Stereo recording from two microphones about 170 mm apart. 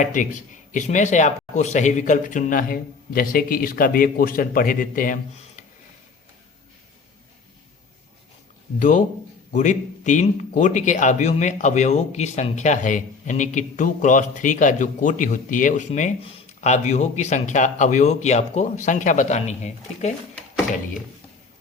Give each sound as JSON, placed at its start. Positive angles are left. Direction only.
{"t": 0.0, "sound": "a man's voice", "side_deg": 50}
{"t": 8.8, "sound": "a man's voice", "side_deg": 45}